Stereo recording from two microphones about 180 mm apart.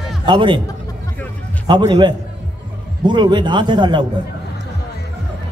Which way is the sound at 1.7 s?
20° right (ahead or behind).